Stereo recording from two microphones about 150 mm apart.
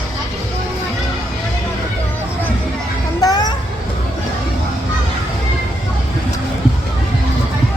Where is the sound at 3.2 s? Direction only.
25° left (ahead or behind).